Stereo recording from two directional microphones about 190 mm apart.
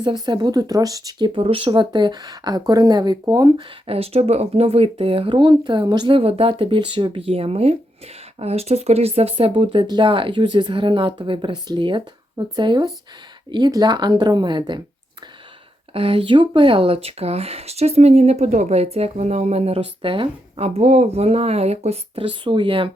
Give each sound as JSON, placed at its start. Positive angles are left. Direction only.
{"t": 0.0, "sound": "speech", "side_deg": -25}
{"t": 3.8, "sound": "speech", "side_deg": -30}
{"t": 15.9, "sound": "speech", "side_deg": -30}